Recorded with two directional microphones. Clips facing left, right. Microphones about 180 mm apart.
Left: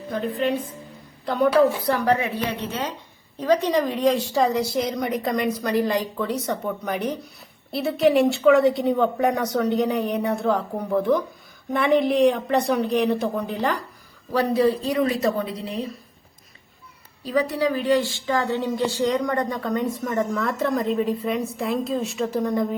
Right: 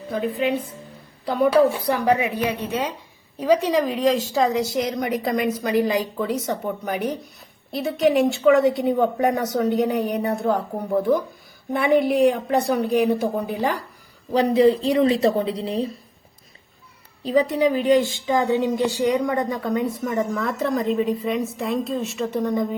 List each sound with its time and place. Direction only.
0.1 s a woman's voice: 5° right (ahead or behind)
14.3 s a woman's voice: 20° right (ahead or behind)
17.2 s a woman's voice: 20° right (ahead or behind); by 22.7 s centre (ahead or behind)